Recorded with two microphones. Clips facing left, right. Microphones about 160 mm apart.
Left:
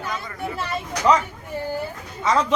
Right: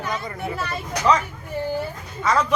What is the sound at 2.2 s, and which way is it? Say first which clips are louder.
Speech: even; 25° left (ahead or behind).